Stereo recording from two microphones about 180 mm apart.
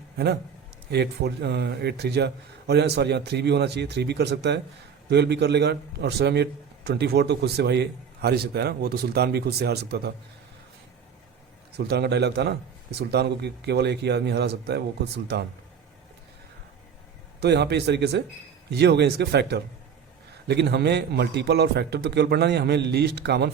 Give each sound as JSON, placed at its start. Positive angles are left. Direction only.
{"t": 0.9, "sound": "a man's voice", "side_deg": -65}
{"t": 11.8, "sound": "speech", "side_deg": -65}
{"t": 17.4, "sound": "a man's voice", "side_deg": -65}